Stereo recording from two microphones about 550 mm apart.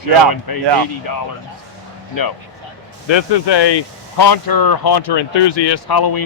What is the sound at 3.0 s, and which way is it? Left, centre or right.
Speech, left.